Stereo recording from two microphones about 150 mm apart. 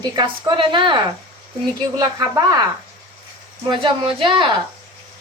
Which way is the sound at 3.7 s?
35° right (ahead or behind).